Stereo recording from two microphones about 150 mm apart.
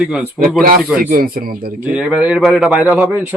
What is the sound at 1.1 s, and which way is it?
Speech, 75° right (ahead or behind).